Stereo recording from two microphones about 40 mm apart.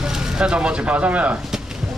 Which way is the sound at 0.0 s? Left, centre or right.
Centre.